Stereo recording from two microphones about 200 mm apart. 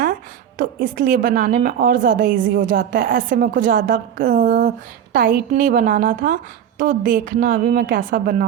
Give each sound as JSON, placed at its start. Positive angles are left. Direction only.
{"t": 0.6, "sound": "a woman's voice", "side_deg": -40}